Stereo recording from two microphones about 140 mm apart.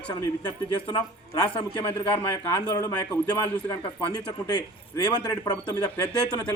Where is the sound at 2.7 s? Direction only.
25° left (ahead or behind).